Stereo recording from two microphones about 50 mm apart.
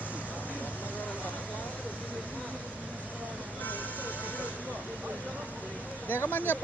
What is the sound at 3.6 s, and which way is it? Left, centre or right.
Vehicle, left.